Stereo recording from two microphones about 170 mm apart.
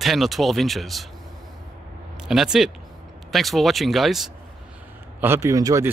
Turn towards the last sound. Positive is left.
turn(degrees=-20)  # may be behind; listen again after turning